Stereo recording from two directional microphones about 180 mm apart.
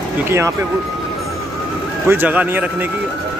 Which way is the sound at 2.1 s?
10° right (ahead or behind).